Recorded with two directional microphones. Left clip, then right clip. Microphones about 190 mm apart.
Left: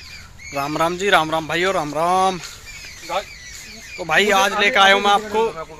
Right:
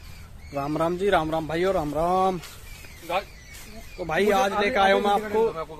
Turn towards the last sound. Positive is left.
turn(degrees=30)  # may be behind; listen again after turning